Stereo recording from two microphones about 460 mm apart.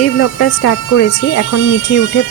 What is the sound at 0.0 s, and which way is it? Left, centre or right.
Speech, left.